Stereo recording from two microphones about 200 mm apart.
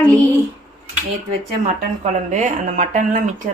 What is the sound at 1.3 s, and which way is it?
A woman's voice, 35° right (ahead or behind).